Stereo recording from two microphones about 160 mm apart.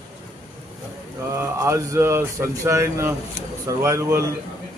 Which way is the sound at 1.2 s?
20° right (ahead or behind).